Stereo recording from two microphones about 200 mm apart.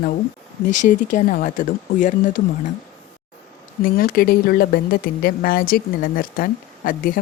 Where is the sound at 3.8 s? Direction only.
45° left (ahead or behind).